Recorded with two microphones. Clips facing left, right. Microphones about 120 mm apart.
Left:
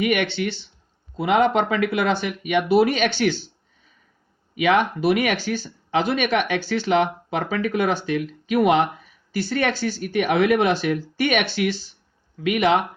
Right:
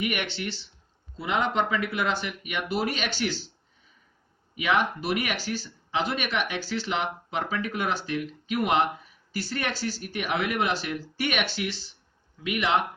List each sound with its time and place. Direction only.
0.0 s speech: 65° left (ahead or behind)
4.5 s speech: 75° left (ahead or behind); by 12.8 s 55° left (ahead or behind)